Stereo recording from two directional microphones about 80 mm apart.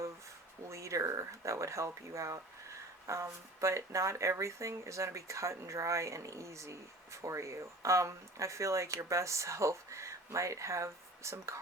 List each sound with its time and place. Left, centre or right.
0.7 s speech: right